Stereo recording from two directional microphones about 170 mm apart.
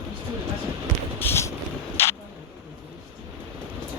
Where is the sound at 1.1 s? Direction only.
15° left (ahead or behind).